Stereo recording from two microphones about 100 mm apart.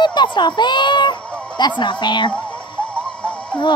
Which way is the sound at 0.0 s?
50° left (ahead or behind).